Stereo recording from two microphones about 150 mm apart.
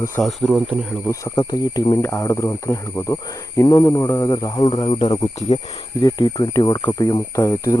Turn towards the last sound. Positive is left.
turn(degrees=20)  # may be behind; listen again after turning